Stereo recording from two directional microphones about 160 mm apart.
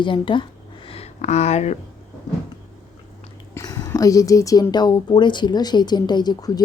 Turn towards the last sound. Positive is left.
turn(degrees=25)  # may be behind; listen again after turning